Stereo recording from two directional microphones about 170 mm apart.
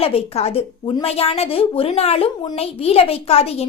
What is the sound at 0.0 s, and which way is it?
A woman's voice, 35° left (ahead or behind).